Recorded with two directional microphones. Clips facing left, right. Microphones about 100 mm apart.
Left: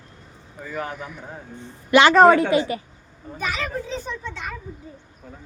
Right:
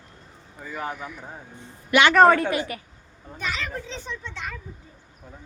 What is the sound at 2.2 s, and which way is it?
A woman's voice, 15° left (ahead or behind).